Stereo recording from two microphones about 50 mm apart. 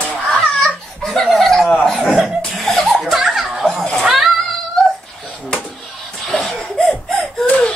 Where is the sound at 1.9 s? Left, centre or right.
Centre.